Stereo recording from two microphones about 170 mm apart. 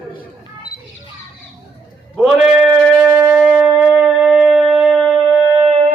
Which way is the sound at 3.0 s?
20° right (ahead or behind).